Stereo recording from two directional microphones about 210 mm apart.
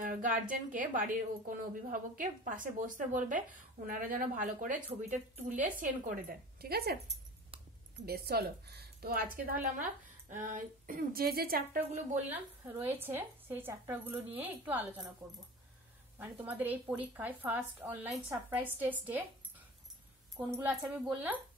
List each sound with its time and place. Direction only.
0.0 s a woman's voice: 40° right (ahead or behind)
8.0 s speech: 50° right (ahead or behind)
12.3 s speech: 10° right (ahead or behind)
16.2 s speech: 10° right (ahead or behind)
20.3 s speech: 10° right (ahead or behind)